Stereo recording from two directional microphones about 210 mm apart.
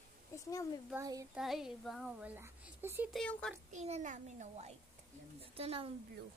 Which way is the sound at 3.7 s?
30° right (ahead or behind).